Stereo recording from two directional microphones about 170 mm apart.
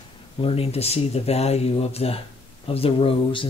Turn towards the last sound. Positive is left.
turn(degrees=35)  # may be behind; listen again after turning